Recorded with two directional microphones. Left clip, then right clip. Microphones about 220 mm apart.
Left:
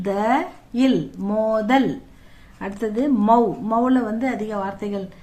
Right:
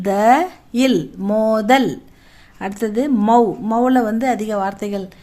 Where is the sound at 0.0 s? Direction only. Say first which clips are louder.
Right 7 dB; 45° right (ahead or behind).